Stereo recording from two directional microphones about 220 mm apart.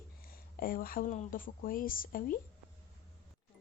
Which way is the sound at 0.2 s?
40° left (ahead or behind).